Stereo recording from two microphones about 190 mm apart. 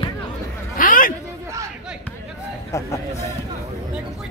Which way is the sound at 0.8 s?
45° left (ahead or behind).